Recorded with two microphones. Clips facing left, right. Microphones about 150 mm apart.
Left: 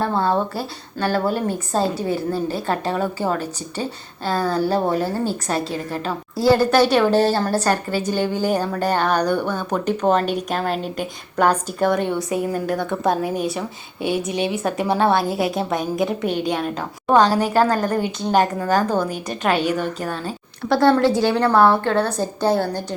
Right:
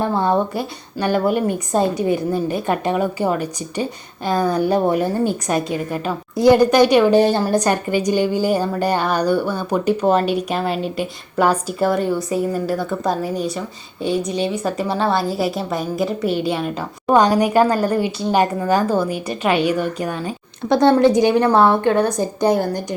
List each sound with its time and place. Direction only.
0.0 s a woman's voice: 15° right (ahead or behind)